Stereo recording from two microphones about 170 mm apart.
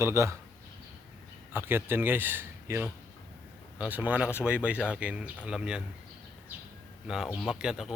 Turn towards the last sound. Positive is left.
turn(degrees=-5)  # may be behind; listen again after turning